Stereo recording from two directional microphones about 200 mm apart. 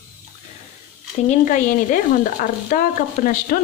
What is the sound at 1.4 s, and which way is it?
A woman's voice, 40° left (ahead or behind).